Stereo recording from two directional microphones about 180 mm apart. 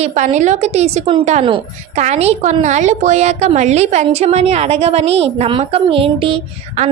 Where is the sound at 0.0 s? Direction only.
40° right (ahead or behind).